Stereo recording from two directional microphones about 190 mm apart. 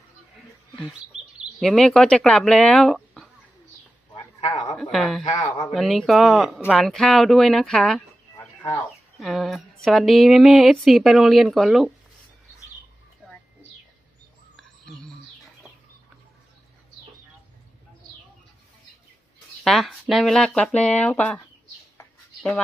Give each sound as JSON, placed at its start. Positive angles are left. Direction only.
{"t": 1.5, "sound": "speech", "side_deg": 0}
{"t": 4.1, "sound": "a sound", "side_deg": 30}
{"t": 4.5, "sound": "a woman's voice", "side_deg": 0}
{"t": 5.2, "sound": "speech", "side_deg": 25}
{"t": 5.7, "sound": "speech", "side_deg": 0}
{"t": 9.2, "sound": "speech", "side_deg": 0}
{"t": 13.2, "sound": "a sound", "side_deg": 10}
{"t": 14.5, "sound": "a sound", "side_deg": 0}
{"t": 19.6, "sound": "speech", "side_deg": 0}